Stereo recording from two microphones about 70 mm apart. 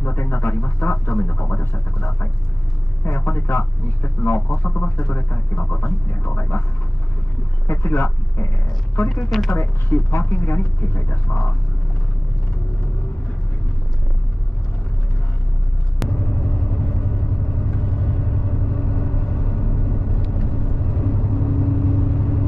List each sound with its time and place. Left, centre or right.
0.0 s speech: left
7.6 s speech: left
9.1 s speech: centre
9.5 s speech: left
17.6 s vehicle: left